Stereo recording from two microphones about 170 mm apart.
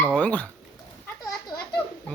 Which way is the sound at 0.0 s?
10° left (ahead or behind).